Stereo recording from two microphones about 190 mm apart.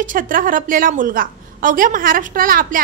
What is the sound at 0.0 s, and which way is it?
A woman's voice, 45° right (ahead or behind).